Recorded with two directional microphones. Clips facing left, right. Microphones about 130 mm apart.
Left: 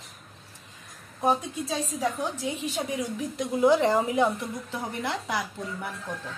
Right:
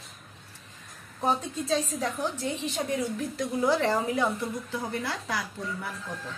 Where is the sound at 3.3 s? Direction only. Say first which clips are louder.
Left 5 dB; 20° left (ahead or behind).